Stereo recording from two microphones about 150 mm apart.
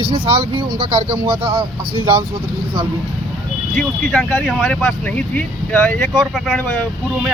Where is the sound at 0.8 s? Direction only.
35° right (ahead or behind).